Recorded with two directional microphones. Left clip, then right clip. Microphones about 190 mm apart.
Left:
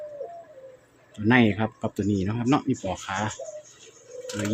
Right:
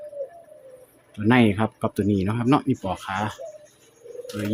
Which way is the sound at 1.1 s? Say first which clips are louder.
Right 1 dB; 15° right (ahead or behind).